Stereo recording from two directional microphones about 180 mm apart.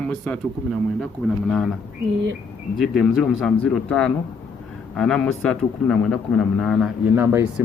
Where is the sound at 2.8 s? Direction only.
Centre (ahead or behind).